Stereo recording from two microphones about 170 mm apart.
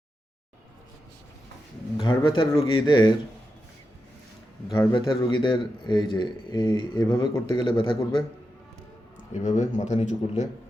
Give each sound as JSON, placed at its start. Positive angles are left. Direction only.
{"t": 2.0, "sound": "a man's voice", "side_deg": 25}
{"t": 4.7, "sound": "a man's voice", "side_deg": 20}
{"t": 9.4, "sound": "speech", "side_deg": 45}